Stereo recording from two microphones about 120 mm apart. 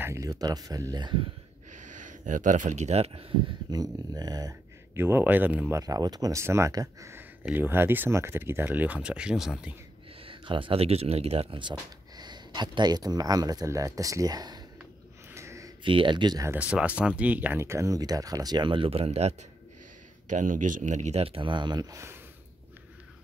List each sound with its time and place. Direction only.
0.0 s speech: 25° right (ahead or behind)
1.7 s speech: 90° right; by 3.3 s 55° right (ahead or behind)
3.7 s speech: 30° right (ahead or behind)
4.9 s speech: 20° right (ahead or behind)
5.8 s speech: 30° right (ahead or behind); by 9.8 s 5° right (ahead or behind)
10.2 s speech: 45° right (ahead or behind)
12.2 s speech: 35° right (ahead or behind)
15.3 s a sound: 25° right (ahead or behind)
15.8 s speech: 45° right (ahead or behind)
16.5 s speech: 10° right (ahead or behind); by 19.3 s 60° right (ahead or behind)
20.2 s speech: 90° right
21.2 s speech: 50° right (ahead or behind)
21.9 s speech: 20° right (ahead or behind)